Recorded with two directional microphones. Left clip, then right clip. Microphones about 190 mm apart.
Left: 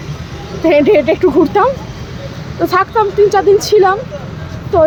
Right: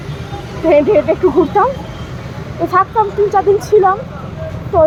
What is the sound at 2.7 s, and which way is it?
Speech, 15° left (ahead or behind).